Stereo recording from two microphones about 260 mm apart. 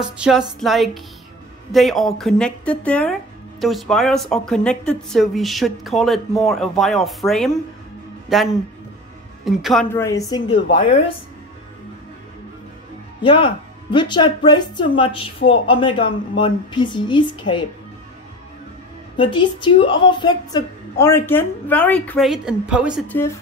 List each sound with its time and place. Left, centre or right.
0.2 s a woman's voice: centre
13.2 s a woman's voice: centre
19.1 s a woman's voice: centre